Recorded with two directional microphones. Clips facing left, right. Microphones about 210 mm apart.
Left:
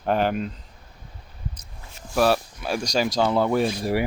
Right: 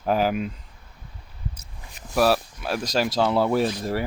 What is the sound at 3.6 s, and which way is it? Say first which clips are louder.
Speech: left 2 dB; 10° left (ahead or behind).